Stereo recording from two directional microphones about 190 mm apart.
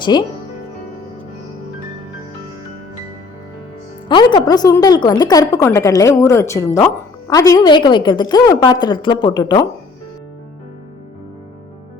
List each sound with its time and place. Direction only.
0.1 s a woman's voice: 25° left (ahead or behind)
4.1 s a woman's voice: 25° left (ahead or behind)